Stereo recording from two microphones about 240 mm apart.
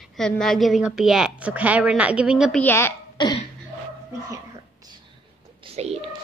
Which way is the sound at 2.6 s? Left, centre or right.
Centre.